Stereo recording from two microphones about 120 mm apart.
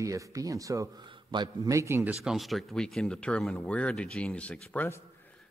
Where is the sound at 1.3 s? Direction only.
40° right (ahead or behind).